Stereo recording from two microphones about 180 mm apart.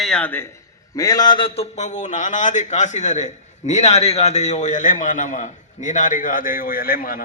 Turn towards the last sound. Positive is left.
turn(degrees=55)  # may be behind; listen again after turning